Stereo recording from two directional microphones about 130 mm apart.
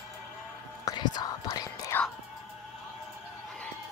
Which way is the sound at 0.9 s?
30° left (ahead or behind).